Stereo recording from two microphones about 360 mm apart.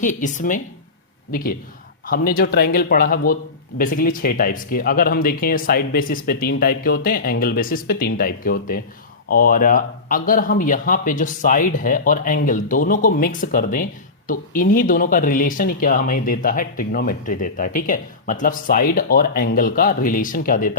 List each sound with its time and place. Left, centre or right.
0.0 s speech: left